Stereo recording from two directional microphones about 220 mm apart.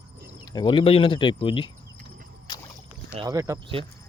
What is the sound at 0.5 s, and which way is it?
Speech, 25° left (ahead or behind).